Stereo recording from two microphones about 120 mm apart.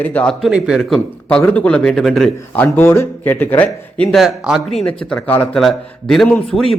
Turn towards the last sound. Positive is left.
turn(degrees=5)  # may be behind; listen again after turning